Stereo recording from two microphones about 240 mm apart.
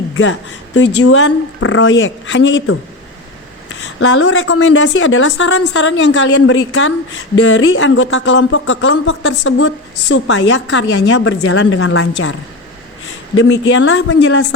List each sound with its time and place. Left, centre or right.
0.2 s a woman's voice: left